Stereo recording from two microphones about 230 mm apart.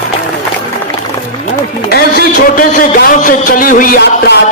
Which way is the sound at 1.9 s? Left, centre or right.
Left.